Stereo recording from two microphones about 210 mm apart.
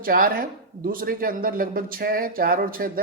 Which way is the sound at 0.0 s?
45° right (ahead or behind).